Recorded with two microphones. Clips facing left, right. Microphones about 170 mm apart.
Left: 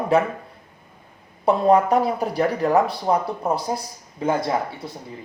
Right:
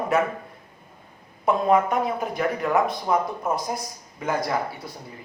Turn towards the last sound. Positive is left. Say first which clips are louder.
# left 4 dB
turn(degrees=25)  # may be behind; listen again after turning